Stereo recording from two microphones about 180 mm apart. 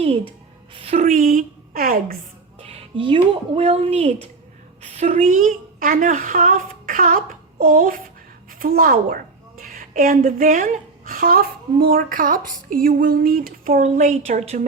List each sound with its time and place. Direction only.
0.7 s speech: 35° right (ahead or behind); by 2.1 s 55° right (ahead or behind)
2.6 s a sound: 35° right (ahead or behind)
3.5 s a woman's voice: 35° right (ahead or behind)